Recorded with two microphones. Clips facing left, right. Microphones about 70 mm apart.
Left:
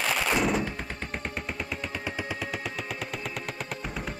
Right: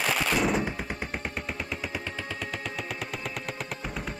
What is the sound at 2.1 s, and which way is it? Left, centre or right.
Music, centre.